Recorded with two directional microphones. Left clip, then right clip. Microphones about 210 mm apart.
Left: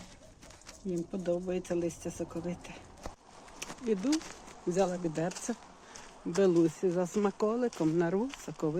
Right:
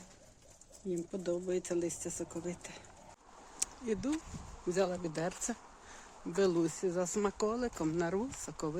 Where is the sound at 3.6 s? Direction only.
10° right (ahead or behind).